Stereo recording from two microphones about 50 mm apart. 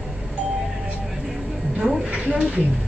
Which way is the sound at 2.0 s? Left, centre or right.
Right.